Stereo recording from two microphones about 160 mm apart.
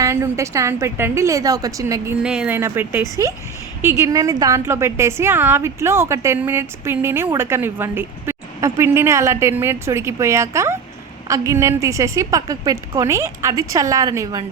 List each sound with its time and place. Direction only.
0.0 s a woman's voice: 20° right (ahead or behind)
2.2 s a woman's voice: 5° right (ahead or behind); by 14.4 s 20° right (ahead or behind)